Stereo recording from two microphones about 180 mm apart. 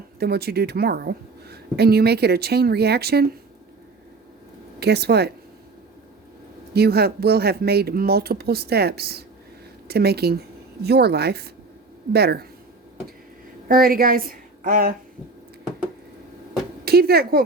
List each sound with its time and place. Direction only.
0.2 s a woman's voice: 60° right (ahead or behind)
4.8 s a woman's voice: 65° right (ahead or behind)
6.7 s a woman's voice: 60° right (ahead or behind)
13.7 s a woman's voice: 55° right (ahead or behind)
16.8 s speech: 60° right (ahead or behind)